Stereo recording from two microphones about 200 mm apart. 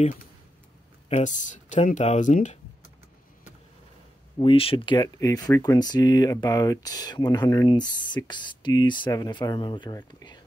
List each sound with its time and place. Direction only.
1.0 s speech: 35° left (ahead or behind)
4.4 s speech: 25° left (ahead or behind)